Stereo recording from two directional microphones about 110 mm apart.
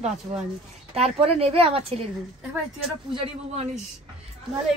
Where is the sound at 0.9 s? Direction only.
65° right (ahead or behind).